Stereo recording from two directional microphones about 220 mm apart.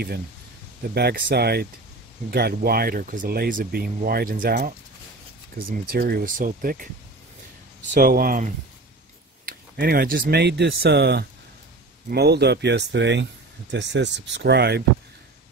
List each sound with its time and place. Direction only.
0.9 s speech: 45° right (ahead or behind)
7.9 s speech: 40° right (ahead or behind)
9.5 s speech: 40° right (ahead or behind)